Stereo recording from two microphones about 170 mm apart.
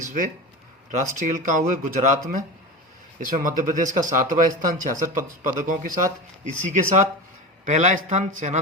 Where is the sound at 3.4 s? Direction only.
50° right (ahead or behind).